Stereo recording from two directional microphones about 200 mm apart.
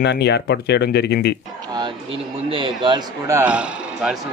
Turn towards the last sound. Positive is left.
turn(degrees=-5)  # may be behind; listen again after turning